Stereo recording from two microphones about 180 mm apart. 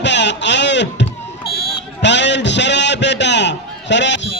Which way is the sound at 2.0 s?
75° left (ahead or behind).